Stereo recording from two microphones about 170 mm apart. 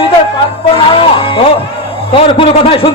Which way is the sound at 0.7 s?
30° left (ahead or behind).